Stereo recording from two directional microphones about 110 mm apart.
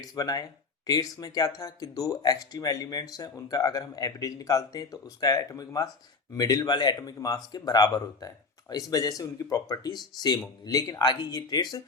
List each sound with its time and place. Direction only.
0.0 s speech: 35° left (ahead or behind)